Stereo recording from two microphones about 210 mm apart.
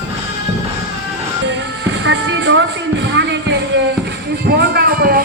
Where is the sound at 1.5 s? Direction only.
60° right (ahead or behind).